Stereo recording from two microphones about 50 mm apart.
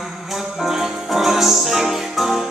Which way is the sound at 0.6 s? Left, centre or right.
Centre.